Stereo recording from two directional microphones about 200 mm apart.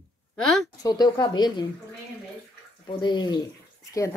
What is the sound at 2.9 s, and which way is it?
Speech, 20° left (ahead or behind).